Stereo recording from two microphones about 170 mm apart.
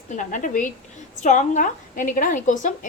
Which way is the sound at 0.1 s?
50° left (ahead or behind).